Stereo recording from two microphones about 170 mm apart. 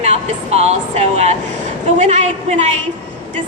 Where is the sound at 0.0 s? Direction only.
40° right (ahead or behind).